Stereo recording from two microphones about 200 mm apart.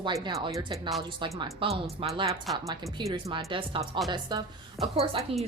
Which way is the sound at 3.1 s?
25° right (ahead or behind).